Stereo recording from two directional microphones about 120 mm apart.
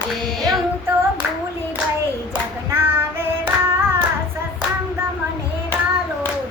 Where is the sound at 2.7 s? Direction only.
20° right (ahead or behind).